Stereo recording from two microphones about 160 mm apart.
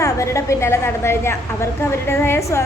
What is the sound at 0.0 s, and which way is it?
A woman's voice, 20° left (ahead or behind).